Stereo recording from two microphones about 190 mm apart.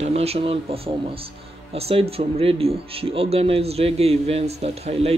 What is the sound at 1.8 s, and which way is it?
Speech, 30° right (ahead or behind).